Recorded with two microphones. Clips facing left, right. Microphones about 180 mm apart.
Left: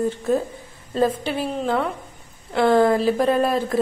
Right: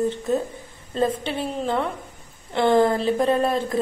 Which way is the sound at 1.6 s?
Centre (ahead or behind).